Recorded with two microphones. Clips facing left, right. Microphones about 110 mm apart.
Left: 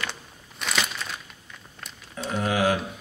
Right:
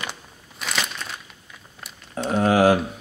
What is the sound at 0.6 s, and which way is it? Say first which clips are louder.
Crumpling: even; centre (ahead or behind).